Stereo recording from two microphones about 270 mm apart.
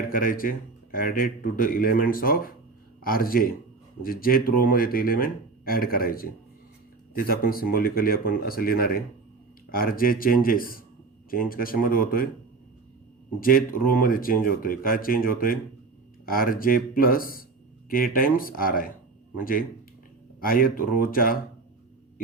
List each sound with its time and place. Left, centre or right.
0.1 s a man's voice: left
13.4 s a man's voice: left
20.4 s a man's voice: left